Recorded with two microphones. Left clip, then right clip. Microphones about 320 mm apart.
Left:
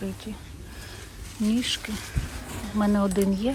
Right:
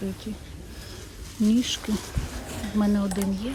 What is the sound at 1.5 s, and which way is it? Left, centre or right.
Speech, centre.